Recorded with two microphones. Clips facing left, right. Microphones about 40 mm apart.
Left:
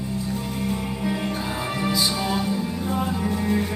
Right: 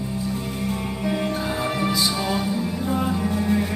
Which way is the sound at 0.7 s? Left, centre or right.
Centre.